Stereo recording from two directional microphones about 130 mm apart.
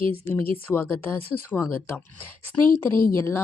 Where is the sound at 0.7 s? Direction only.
15° left (ahead or behind).